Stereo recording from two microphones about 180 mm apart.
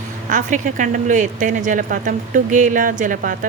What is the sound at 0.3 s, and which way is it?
Speech, 45° right (ahead or behind).